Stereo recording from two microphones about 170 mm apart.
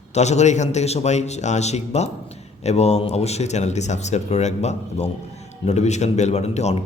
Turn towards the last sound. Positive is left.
turn(degrees=40)  # may be behind; listen again after turning